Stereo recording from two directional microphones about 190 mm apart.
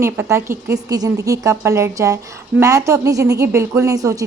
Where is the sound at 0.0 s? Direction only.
15° right (ahead or behind).